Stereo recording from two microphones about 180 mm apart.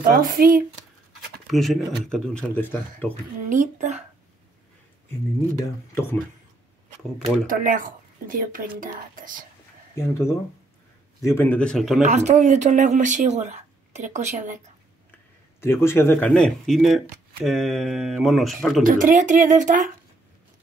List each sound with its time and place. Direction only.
0.1 s speech: 50° right (ahead or behind)
1.5 s speech: centre (ahead or behind)
3.4 s speech: 40° right (ahead or behind)
7.4 s speech: 50° right (ahead or behind)
9.9 s speech: 15° left (ahead or behind)
12.0 s speech: 40° right (ahead or behind)
15.6 s speech: 15° left (ahead or behind)
18.9 s speech: 50° right (ahead or behind)